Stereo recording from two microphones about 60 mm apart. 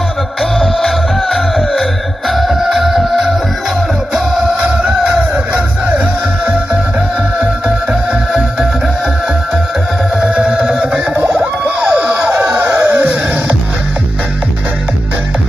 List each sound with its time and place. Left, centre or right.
0.4 s music: centre
4.1 s music: centre
5.5 s music: right
8.3 s music: centre
10.2 s a sound: centre
11.9 s emergency vehicle: right
12.5 s a sound: right